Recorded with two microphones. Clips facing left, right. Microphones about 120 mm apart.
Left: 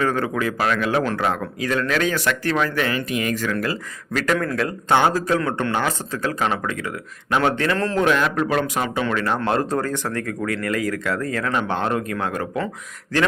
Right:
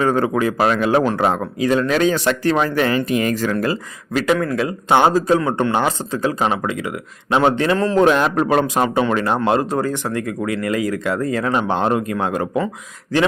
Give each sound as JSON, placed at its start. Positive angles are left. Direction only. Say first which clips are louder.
{"t": 0.0, "sound": "speech", "louder": "right 5 dB", "side_deg": -30}
{"t": 4.1, "sound": "a man's voice", "louder": "right 4 dB", "side_deg": -10}
{"t": 4.9, "sound": "speech", "louder": "right 5 dB", "side_deg": -20}
{"t": 7.9, "sound": "a man's voice", "louder": "right 5 dB", "side_deg": -30}
{"t": 9.4, "sound": "speech", "louder": "right 3 dB", "side_deg": -15}